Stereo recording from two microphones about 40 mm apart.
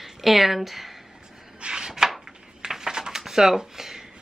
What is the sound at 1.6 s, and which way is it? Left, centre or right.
Chopping, centre.